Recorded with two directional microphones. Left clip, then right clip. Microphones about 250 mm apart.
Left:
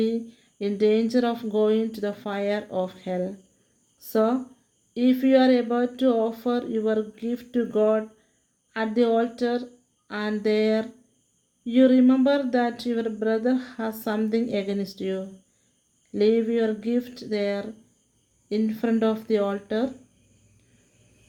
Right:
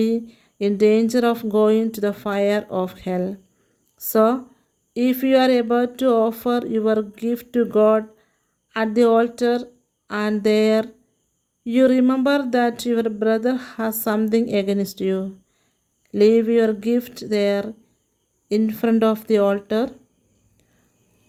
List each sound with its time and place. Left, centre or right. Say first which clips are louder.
0.0 s speech: right 4 dB; right